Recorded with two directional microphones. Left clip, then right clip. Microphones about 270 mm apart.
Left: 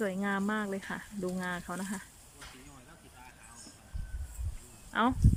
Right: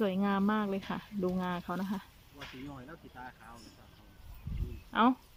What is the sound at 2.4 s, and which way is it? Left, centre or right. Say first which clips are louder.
Hiss: right 3 dB; right.